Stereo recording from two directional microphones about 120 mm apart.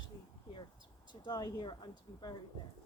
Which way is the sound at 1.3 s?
30° left (ahead or behind).